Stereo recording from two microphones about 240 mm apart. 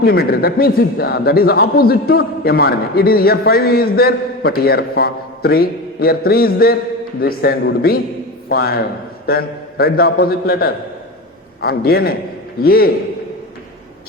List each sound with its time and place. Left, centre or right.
0.0 s speech: left